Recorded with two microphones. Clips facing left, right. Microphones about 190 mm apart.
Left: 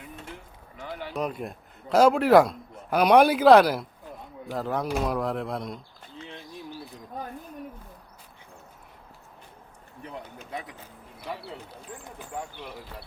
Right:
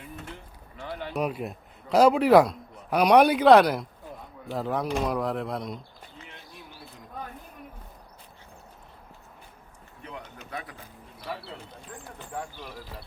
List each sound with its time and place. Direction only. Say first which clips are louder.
0.8 s a sound: right 1 dB; 5° left (ahead or behind)
1.2 s a man's voice: right 1 dB; 5° right (ahead or behind)
6.2 s bird: left 6 dB; 30° left (ahead or behind)
10.5 s speech: left 1 dB; 20° left (ahead or behind)